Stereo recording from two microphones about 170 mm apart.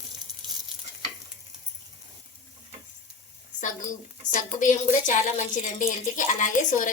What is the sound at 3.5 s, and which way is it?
A woman's voice, 50° left (ahead or behind).